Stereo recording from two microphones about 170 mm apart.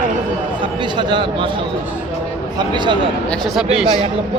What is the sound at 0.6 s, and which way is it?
Speech, 25° right (ahead or behind).